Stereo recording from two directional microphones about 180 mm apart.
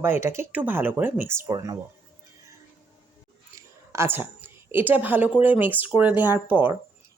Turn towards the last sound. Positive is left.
turn(degrees=-10)  # may be behind; listen again after turning